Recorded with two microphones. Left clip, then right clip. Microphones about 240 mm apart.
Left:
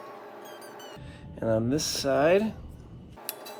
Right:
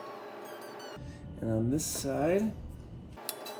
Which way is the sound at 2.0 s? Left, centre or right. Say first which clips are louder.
Left 8 dB; left.